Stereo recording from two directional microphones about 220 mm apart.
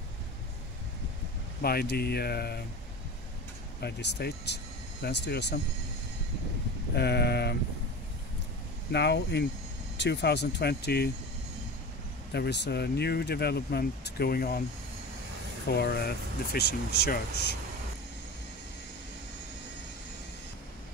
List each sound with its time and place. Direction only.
1.6 s speech: 45° left (ahead or behind)
3.8 s speech: 50° left (ahead or behind)
7.0 s speech: 50° left (ahead or behind)
8.9 s speech: 50° left (ahead or behind)
12.3 s speech: 50° left (ahead or behind)
15.7 s speech: 45° left (ahead or behind)